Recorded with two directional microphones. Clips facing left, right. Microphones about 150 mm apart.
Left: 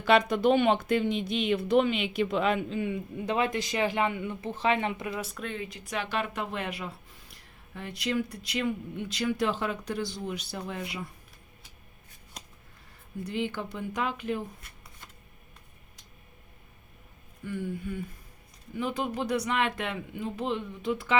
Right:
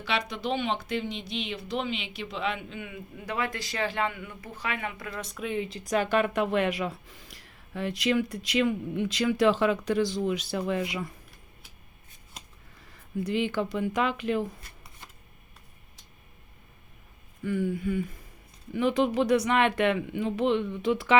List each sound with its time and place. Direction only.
0.0 s speech: 50° left (ahead or behind); by 5.4 s 10° left (ahead or behind)
5.4 s speech: 10° right (ahead or behind)
5.6 s speech: 35° right (ahead or behind); by 11.0 s 90° right
13.2 s speech: 90° right
17.4 s speech: 90° right